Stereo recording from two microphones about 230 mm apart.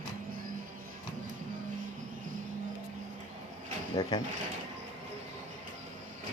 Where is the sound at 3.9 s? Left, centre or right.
Centre.